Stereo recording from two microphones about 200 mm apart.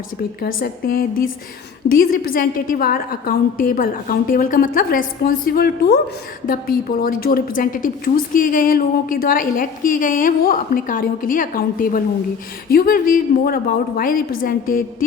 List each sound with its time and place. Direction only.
0.4 s a woman's voice: 45° left (ahead or behind)